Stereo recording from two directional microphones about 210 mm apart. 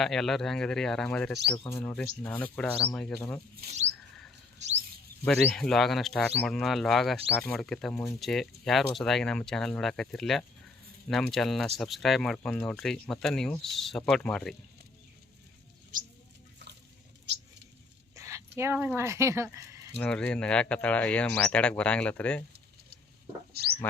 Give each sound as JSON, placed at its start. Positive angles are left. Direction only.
{"t": 0.0, "sound": "speech", "side_deg": 0}
{"t": 1.5, "sound": "speech", "side_deg": 15}
{"t": 3.5, "sound": "speech", "side_deg": -40}
{"t": 4.5, "sound": "a sound", "side_deg": -35}
{"t": 5.2, "sound": "speech", "side_deg": 5}
{"t": 15.9, "sound": "mouse", "side_deg": -40}
{"t": 18.2, "sound": "speech", "side_deg": -15}
{"t": 20.0, "sound": "speech", "side_deg": 5}
{"t": 23.8, "sound": "speech", "side_deg": 10}